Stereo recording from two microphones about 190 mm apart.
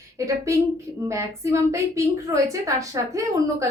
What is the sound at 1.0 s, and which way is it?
A woman's voice, 15° right (ahead or behind).